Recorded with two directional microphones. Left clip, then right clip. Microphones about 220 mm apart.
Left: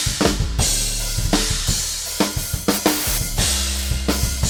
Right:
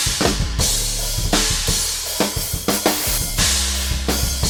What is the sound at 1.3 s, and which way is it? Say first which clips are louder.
Drum kit: right 2 dB; centre (ahead or behind).